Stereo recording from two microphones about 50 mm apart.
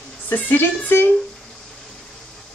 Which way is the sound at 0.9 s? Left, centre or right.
Left.